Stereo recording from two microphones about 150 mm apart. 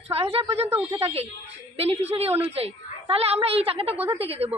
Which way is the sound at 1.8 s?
40° right (ahead or behind).